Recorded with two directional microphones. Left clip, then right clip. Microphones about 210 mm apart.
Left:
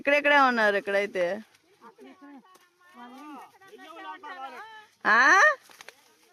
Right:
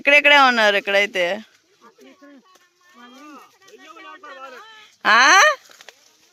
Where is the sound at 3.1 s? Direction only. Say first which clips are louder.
Right 2 dB; 20° left (ahead or behind).